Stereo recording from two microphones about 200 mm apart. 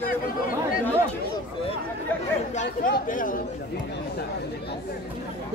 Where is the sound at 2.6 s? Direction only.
40° left (ahead or behind).